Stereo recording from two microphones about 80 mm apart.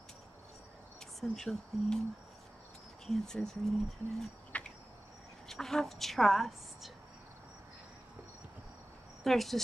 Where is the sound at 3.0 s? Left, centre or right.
Centre.